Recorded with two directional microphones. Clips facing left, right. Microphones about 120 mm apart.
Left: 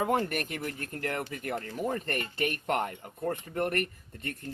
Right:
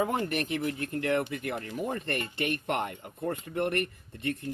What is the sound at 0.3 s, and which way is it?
Speech, 45° left (ahead or behind).